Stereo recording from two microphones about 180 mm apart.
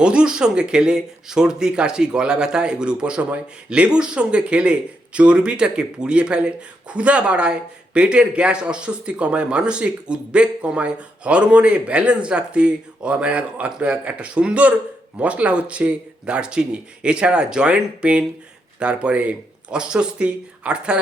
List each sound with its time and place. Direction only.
0.0 s speech: 5° right (ahead or behind)